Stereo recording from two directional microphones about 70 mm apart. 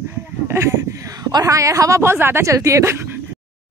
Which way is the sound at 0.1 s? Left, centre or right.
Right.